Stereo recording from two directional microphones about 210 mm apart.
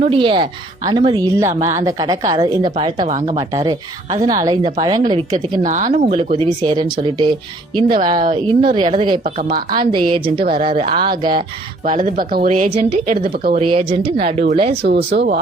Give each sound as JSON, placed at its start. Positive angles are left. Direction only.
{"t": 0.0, "sound": "speech", "side_deg": -25}
{"t": 3.1, "sound": "speech", "side_deg": -35}
{"t": 3.3, "sound": "speech", "side_deg": -20}
{"t": 5.6, "sound": "speech", "side_deg": -35}
{"t": 9.2, "sound": "speech", "side_deg": -40}
{"t": 9.7, "sound": "speech", "side_deg": -20}
{"t": 10.4, "sound": "speech", "side_deg": -45}
{"t": 10.7, "sound": "speech", "side_deg": -25}
{"t": 11.9, "sound": "speech", "side_deg": -40}
{"t": 13.6, "sound": "speech", "side_deg": -25}
{"t": 14.8, "sound": "speech", "side_deg": -55}